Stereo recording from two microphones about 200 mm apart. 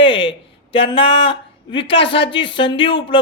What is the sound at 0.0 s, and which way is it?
Speech, 25° left (ahead or behind).